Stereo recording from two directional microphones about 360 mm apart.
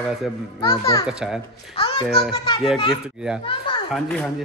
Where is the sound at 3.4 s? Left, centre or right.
Centre.